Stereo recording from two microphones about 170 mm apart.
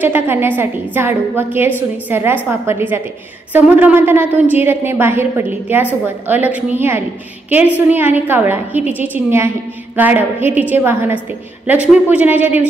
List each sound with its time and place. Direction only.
0.0 s a woman's voice: 10° right (ahead or behind)